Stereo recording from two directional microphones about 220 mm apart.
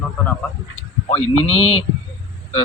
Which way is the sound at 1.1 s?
30° left (ahead or behind).